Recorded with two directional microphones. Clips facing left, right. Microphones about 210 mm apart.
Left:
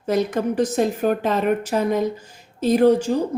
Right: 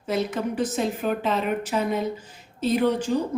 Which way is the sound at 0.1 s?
45° left (ahead or behind).